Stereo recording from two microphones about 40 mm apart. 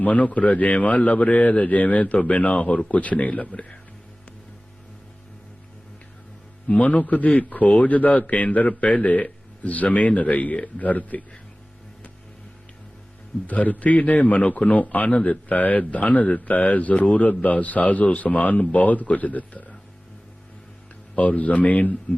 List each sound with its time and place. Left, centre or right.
0.0 s a man's voice: left
6.7 s a man's voice: left
13.5 s a man's voice: left
21.2 s a man's voice: left